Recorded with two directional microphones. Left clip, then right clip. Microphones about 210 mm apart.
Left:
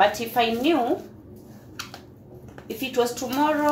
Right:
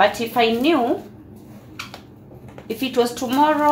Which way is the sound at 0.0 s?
20° right (ahead or behind).